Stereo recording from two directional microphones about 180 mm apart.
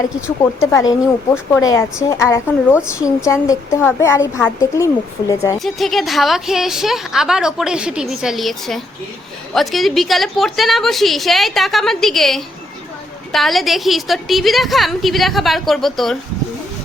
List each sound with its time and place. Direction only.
0.3 s speech: 15° left (ahead or behind)
5.5 s a woman's voice: centre (ahead or behind)